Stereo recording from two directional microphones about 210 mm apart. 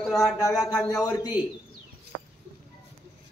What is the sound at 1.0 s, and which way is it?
Speech, 15° left (ahead or behind).